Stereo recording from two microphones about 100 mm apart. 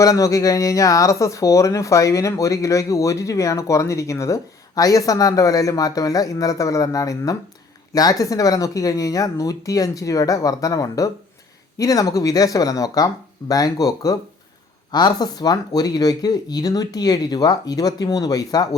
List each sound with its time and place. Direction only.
0.0 s speech: 35° left (ahead or behind)